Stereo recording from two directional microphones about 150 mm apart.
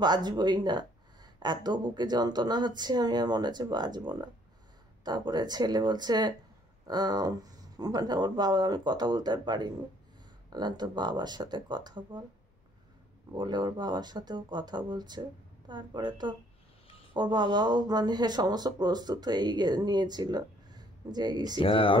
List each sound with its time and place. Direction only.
0.0 s speech: 30° right (ahead or behind)
13.3 s speech: 30° right (ahead or behind)
21.5 s speech: 35° left (ahead or behind)